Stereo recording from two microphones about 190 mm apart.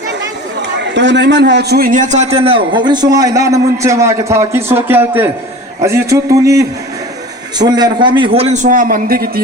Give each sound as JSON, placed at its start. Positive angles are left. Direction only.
{"t": 0.8, "sound": "a man's voice", "side_deg": -70}